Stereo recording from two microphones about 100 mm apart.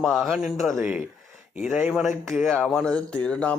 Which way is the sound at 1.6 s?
15° right (ahead or behind).